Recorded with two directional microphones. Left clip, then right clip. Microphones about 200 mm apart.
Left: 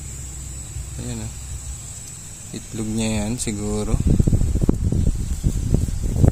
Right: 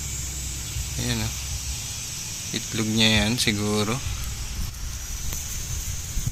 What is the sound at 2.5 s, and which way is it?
Speech, 10° left (ahead or behind).